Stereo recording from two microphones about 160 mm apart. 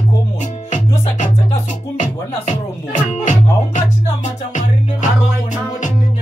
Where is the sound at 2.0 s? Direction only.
50° left (ahead or behind).